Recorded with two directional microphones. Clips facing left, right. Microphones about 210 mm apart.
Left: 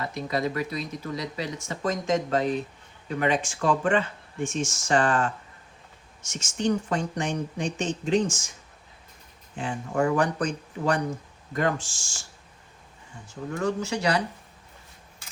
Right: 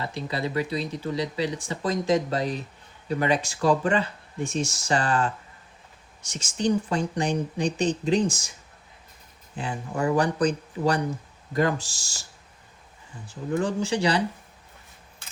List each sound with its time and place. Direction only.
0.0 s speech: 30° right (ahead or behind)
9.6 s speech: 35° right (ahead or behind)
13.6 s speech: 30° right (ahead or behind)